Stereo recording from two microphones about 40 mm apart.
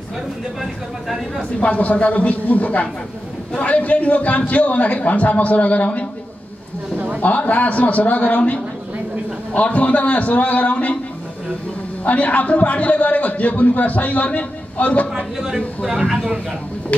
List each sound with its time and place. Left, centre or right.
0.6 s speech: centre
1.6 s a man's voice: left
7.2 s a man's voice: left
9.6 s a man's voice: left
12.0 s a man's voice: left
15.3 s speech: centre
15.8 s speech: centre